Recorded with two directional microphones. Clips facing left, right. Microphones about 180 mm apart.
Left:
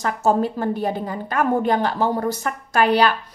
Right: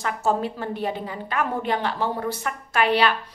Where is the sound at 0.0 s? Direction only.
40° left (ahead or behind).